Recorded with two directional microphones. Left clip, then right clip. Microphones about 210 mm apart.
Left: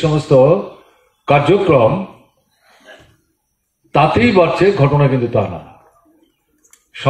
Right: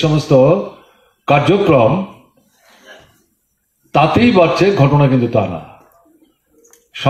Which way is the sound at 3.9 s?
45° right (ahead or behind).